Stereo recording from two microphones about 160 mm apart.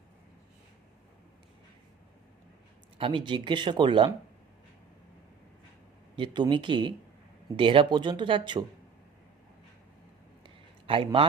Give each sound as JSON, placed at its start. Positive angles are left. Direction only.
{"t": 3.0, "sound": "speech", "side_deg": -30}
{"t": 6.1, "sound": "speech", "side_deg": -30}
{"t": 10.4, "sound": "a sound", "side_deg": -35}